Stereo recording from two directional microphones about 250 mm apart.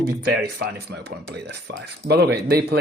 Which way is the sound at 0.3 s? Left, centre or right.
Right.